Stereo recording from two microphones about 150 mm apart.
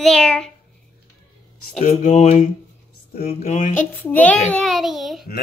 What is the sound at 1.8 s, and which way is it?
Speech, 55° left (ahead or behind).